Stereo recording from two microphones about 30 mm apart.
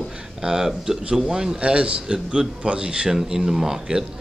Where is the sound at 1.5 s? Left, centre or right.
Right.